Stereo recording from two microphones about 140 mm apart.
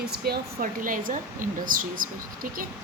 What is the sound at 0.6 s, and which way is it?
A woman's voice, 75° right (ahead or behind).